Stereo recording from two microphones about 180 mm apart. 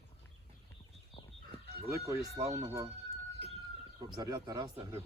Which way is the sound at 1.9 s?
15° right (ahead or behind).